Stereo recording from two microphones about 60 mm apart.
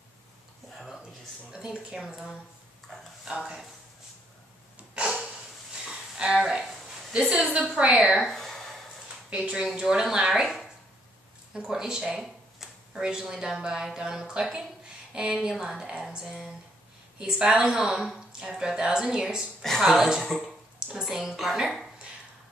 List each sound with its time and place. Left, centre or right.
1.5 s speech: centre
4.7 s a sound: centre
7.1 s speech: centre
8.4 s a sound: centre
9.3 s speech: centre
11.5 s speech: centre
17.7 s a woman's voice: centre